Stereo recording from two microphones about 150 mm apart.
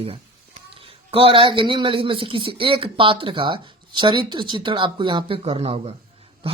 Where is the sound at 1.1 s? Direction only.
35° right (ahead or behind).